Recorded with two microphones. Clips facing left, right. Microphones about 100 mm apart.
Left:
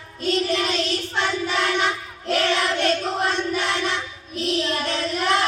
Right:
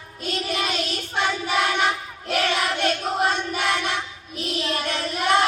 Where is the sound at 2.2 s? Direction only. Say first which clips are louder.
Left 2 dB; 15° right (ahead or behind).